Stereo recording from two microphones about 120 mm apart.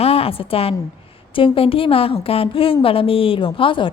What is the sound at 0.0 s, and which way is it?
A woman's voice, 55° left (ahead or behind).